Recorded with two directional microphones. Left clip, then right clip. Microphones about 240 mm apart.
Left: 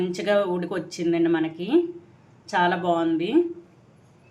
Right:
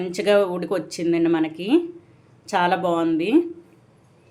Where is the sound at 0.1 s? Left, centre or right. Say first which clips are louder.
Right 7 dB; right.